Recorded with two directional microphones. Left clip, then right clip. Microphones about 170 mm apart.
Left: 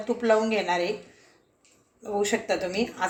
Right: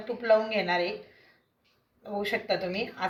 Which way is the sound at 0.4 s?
40° left (ahead or behind).